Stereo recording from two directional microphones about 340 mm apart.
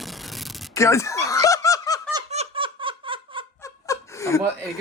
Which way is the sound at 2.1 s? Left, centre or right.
Centre.